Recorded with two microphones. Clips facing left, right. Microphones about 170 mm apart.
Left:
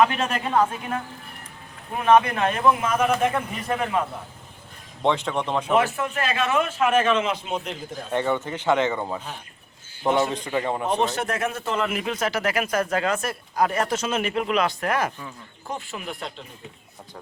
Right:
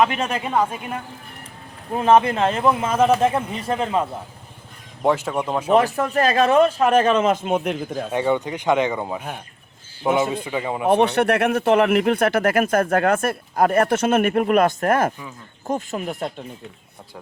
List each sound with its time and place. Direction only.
0.2 s speech: 10° right (ahead or behind)
1.9 s a man's voice: 30° right (ahead or behind)
5.0 s speech: 5° right (ahead or behind)
5.7 s a man's voice: 40° right (ahead or behind); by 7.8 s 55° right (ahead or behind)
8.1 s speech: 15° right (ahead or behind)
10.8 s speech: 65° right (ahead or behind); by 16.3 s 45° right (ahead or behind)